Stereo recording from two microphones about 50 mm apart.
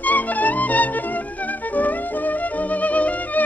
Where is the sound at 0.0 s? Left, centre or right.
Left.